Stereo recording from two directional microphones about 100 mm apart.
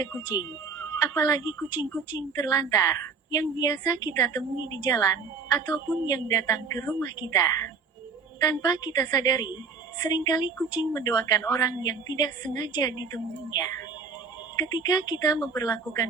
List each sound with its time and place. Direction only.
0.0 s a woman's voice: 40° left (ahead or behind)
1.7 s speech: 45° left (ahead or behind)
2.4 s a woman's voice: 35° left (ahead or behind)
14.6 s a woman's voice: 40° left (ahead or behind)